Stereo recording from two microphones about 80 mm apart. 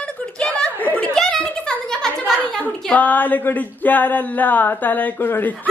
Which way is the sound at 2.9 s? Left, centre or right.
Centre.